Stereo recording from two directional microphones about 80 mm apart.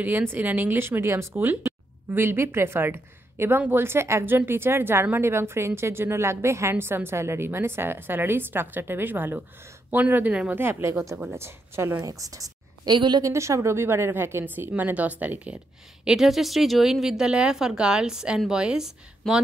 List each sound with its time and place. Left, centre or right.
0.0 s a woman's voice: right
10.6 s a woman's voice: right
12.0 s a woman's voice: right
12.9 s a woman's voice: right
13.2 s a woman's voice: right; by 15.6 s centre
16.1 s speech: centre